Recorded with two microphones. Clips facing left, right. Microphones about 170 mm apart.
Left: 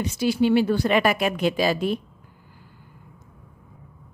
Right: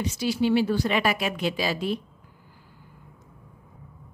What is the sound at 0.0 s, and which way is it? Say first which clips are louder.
A woman's voice: left 3 dB; 55° left (ahead or behind).